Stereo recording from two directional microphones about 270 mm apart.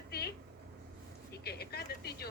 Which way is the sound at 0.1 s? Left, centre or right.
Left.